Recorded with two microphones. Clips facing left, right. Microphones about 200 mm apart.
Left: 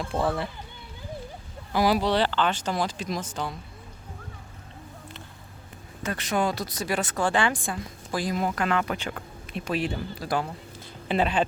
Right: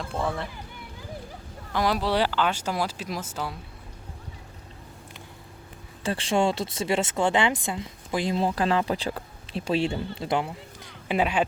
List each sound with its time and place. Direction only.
0.1 s speech: 5° left (ahead or behind)
1.7 s speech: 5° left (ahead or behind)
2.0 s speech: 10° right (ahead or behind)
6.0 s speech: 30° right (ahead or behind)
11.1 s speech: 10° right (ahead or behind)